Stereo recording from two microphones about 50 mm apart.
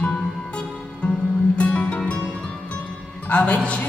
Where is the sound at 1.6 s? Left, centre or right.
Left.